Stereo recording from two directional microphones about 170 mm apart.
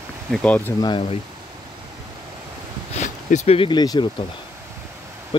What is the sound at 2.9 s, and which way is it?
Speech, 45° left (ahead or behind).